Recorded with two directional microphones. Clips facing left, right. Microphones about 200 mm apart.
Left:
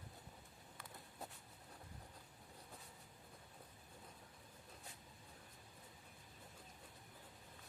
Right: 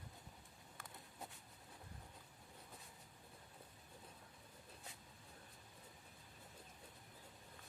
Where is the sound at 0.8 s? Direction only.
50° right (ahead or behind).